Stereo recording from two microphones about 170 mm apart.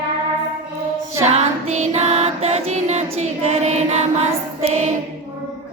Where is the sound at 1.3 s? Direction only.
40° right (ahead or behind).